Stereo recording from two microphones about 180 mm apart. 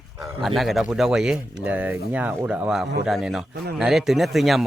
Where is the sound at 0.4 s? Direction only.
Centre (ahead or behind).